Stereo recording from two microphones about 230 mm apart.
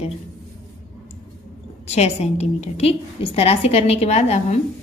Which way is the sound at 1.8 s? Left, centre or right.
Left.